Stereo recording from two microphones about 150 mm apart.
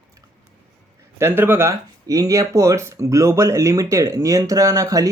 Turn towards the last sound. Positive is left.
turn(degrees=-20)  # may be behind; listen again after turning